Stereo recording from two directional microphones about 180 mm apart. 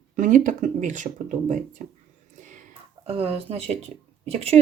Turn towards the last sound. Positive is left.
turn(degrees=-35)  # may be behind; listen again after turning